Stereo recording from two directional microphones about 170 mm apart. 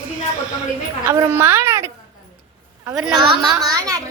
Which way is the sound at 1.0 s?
15° right (ahead or behind).